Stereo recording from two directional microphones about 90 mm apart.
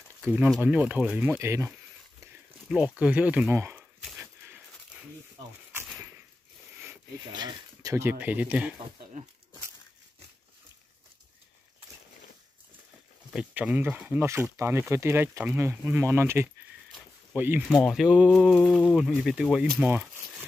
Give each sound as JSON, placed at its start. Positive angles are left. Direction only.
{"t": 0.2, "sound": "speech", "side_deg": -15}
{"t": 1.4, "sound": "speech", "side_deg": -30}
{"t": 2.7, "sound": "speech", "side_deg": -10}
{"t": 7.3, "sound": "speech", "side_deg": -50}
{"t": 7.9, "sound": "speech", "side_deg": -25}
{"t": 13.6, "sound": "speech", "side_deg": -20}
{"t": 14.2, "sound": "speech", "side_deg": -30}
{"t": 17.7, "sound": "speech", "side_deg": -5}
{"t": 18.6, "sound": "speech", "side_deg": 10}
{"t": 18.9, "sound": "speech", "side_deg": -5}
{"t": 19.8, "sound": "a sound", "side_deg": -15}